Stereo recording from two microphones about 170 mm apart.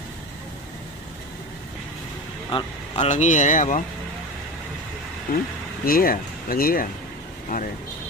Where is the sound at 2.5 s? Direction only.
35° left (ahead or behind).